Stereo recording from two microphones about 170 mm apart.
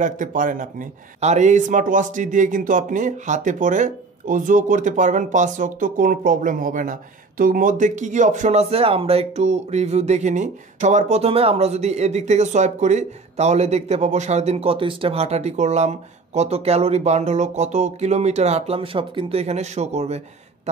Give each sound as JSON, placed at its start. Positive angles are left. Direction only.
{"t": 0.0, "sound": "speech", "side_deg": -50}